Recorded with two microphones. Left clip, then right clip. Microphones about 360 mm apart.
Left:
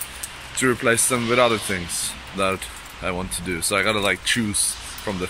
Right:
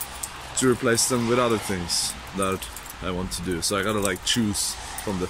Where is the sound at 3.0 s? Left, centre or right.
Centre.